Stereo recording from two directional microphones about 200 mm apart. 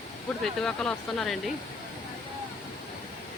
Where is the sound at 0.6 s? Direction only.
5° left (ahead or behind).